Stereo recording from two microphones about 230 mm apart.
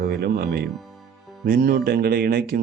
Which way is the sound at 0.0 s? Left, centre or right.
Right.